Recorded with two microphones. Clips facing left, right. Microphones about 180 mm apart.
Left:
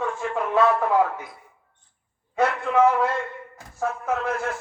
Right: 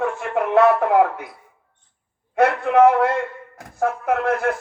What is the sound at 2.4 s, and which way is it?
A man's voice, 60° right (ahead or behind).